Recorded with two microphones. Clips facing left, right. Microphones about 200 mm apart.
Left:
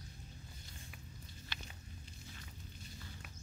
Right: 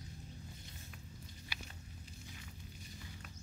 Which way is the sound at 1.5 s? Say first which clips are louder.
Right 1 dB; 10° right (ahead or behind).